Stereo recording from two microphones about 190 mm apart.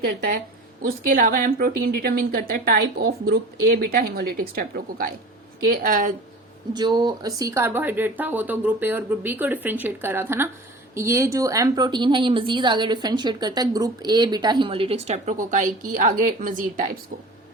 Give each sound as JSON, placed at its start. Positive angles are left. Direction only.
{"t": 0.0, "sound": "a woman's voice", "side_deg": -50}
{"t": 6.7, "sound": "a woman's voice", "side_deg": -20}